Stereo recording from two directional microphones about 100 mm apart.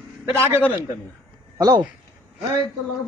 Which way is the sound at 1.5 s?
40° right (ahead or behind).